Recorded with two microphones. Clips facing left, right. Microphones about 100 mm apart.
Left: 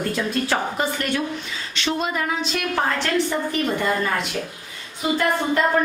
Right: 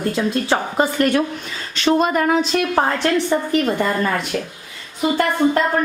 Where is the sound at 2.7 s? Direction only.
35° right (ahead or behind).